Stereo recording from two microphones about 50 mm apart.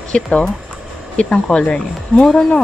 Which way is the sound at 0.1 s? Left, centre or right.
Left.